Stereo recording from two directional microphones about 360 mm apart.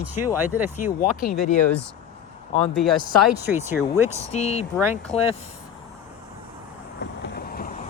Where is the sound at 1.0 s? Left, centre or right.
Left.